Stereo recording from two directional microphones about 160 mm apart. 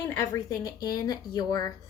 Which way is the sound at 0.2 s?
20° left (ahead or behind).